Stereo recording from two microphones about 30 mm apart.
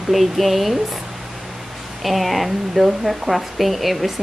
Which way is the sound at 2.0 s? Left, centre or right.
Centre.